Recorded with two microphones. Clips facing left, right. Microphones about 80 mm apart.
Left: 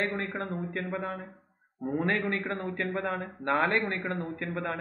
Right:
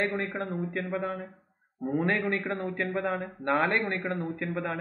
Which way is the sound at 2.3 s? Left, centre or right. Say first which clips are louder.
Right 1 dB; right.